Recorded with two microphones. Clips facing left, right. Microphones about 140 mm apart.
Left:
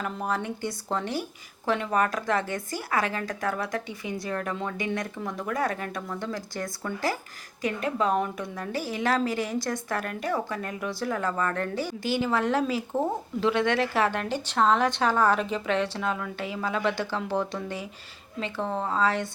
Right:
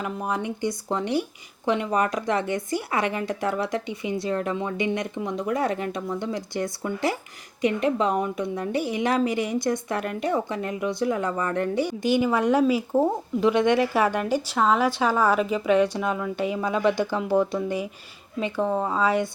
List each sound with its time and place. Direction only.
0.0 s a woman's voice: 10° right (ahead or behind)